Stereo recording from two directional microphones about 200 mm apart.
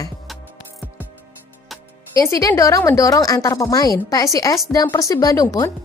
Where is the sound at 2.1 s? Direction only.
15° left (ahead or behind).